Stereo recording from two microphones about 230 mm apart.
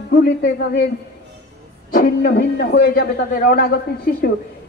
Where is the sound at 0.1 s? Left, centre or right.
Left.